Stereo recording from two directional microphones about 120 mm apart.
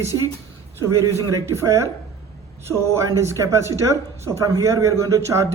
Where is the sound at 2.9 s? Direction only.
25° right (ahead or behind).